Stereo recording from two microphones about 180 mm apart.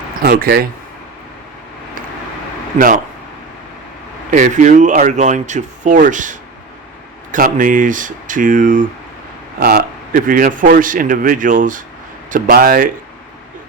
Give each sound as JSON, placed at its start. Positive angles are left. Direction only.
{"t": 0.2, "sound": "speech", "side_deg": -55}
{"t": 2.7, "sound": "a man's voice", "side_deg": -50}
{"t": 4.3, "sound": "a man's voice", "side_deg": -45}